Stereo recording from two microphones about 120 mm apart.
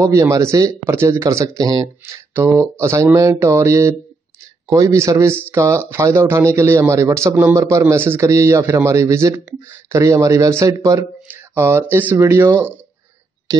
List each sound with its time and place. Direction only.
0.0 s speech: 25° right (ahead or behind)